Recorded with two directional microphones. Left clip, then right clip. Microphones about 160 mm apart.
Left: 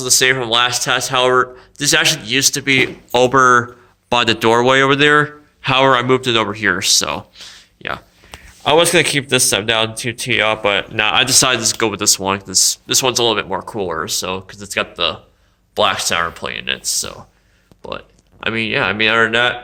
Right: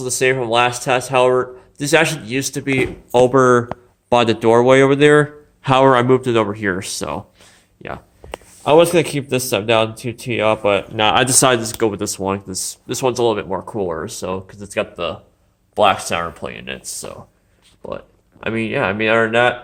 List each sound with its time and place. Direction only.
0.0 s a man's voice: 30° right (ahead or behind)
5.6 s speech: 40° right (ahead or behind); by 8.0 s 25° right (ahead or behind)
8.6 s speech: 10° right (ahead or behind)
10.9 s a man's voice: 25° right (ahead or behind)
11.2 s a man's voice: 45° right (ahead or behind); by 19.5 s 20° right (ahead or behind)